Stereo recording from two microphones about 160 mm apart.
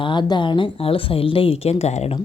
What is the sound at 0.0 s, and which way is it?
Speech, 30° left (ahead or behind).